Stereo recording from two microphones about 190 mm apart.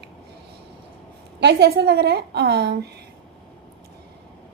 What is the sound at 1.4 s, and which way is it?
A woman's voice, 60° right (ahead or behind).